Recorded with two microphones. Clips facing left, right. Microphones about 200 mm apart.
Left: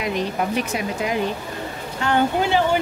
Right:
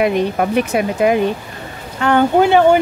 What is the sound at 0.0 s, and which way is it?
Speech, 60° right (ahead or behind).